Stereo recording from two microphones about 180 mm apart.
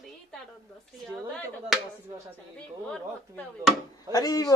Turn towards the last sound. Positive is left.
turn(degrees=20)  # may be behind; listen again after turning